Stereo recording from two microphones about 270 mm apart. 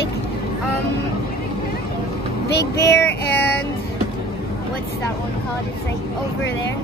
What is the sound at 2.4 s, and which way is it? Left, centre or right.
Speech, left.